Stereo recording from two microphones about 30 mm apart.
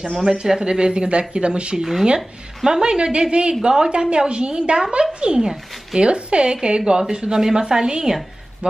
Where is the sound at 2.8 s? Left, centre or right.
Right.